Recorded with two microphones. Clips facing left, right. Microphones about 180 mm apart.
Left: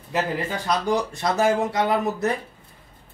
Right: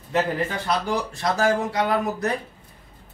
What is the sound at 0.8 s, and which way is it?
Speech, 20° left (ahead or behind).